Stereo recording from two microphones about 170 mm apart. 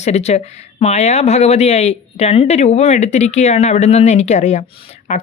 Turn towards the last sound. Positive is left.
turn(degrees=35)  # may be behind; listen again after turning